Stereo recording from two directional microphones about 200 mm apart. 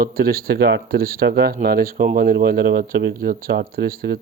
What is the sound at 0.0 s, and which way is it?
Speech, 50° right (ahead or behind).